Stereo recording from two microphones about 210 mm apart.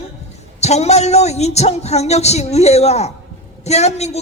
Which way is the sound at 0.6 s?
30° left (ahead or behind).